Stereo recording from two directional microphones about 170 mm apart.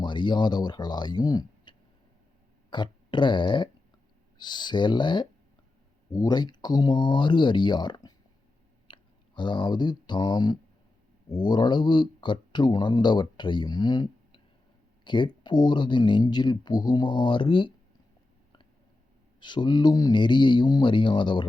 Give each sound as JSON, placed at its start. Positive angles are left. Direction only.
{"t": 0.0, "sound": "speech", "side_deg": 25}
{"t": 19.4, "sound": "speech", "side_deg": 25}